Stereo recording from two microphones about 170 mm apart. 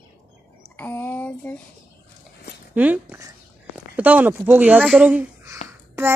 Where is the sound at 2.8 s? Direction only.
10° right (ahead or behind).